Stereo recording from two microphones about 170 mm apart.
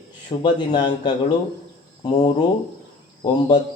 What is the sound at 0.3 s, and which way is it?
Speech, 25° left (ahead or behind).